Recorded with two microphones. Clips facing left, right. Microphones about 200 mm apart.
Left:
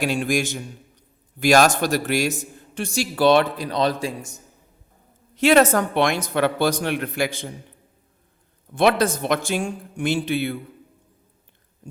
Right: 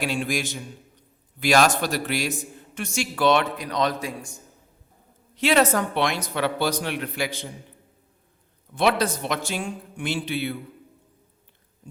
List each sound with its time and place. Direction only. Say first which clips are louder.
0.0 s a man's voice: left 4 dB; 45° left (ahead or behind); by 4.4 s 25° left (ahead or behind)
5.4 s speech: left 4 dB; 50° left (ahead or behind)
8.7 s speech: left 4 dB; 50° left (ahead or behind)